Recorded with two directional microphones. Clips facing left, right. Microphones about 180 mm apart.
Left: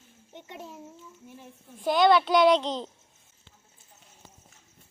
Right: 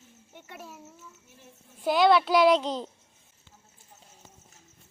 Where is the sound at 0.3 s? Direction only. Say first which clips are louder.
Left 3 dB; 20° left (ahead or behind).